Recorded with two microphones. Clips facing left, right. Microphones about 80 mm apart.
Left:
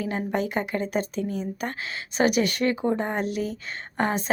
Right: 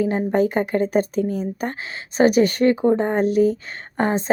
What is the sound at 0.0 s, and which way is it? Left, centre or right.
A woman's voice, right.